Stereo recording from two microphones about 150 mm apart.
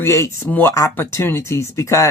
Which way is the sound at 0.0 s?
20° left (ahead or behind).